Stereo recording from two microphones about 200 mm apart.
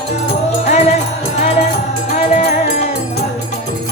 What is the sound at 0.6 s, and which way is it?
Music, 35° left (ahead or behind).